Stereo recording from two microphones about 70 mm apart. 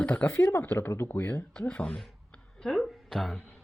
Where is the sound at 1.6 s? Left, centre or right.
Centre.